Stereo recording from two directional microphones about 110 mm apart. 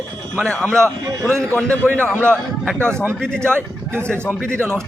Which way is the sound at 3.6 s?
20° right (ahead or behind).